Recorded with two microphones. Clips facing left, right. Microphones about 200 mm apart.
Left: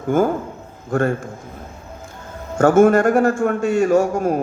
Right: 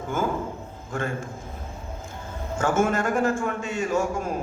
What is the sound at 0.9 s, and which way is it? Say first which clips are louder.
Speech: left 11 dB; 45° left (ahead or behind).